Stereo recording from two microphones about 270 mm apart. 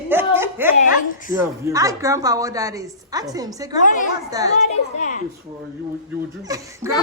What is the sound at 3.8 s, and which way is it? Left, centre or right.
Speech, left.